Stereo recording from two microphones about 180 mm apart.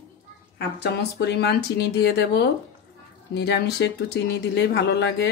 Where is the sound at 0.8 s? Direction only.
65° left (ahead or behind).